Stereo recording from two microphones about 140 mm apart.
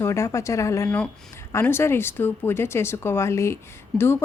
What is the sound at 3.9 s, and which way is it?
Speech, 5° left (ahead or behind).